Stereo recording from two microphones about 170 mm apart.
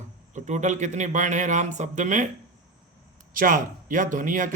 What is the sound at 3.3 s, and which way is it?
Speech, 50° right (ahead or behind).